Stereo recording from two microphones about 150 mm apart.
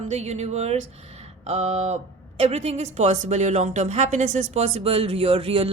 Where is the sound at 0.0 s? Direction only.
45° right (ahead or behind).